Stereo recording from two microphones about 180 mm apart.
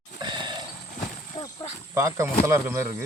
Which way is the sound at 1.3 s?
25° left (ahead or behind).